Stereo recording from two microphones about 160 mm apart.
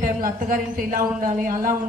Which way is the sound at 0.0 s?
60° right (ahead or behind).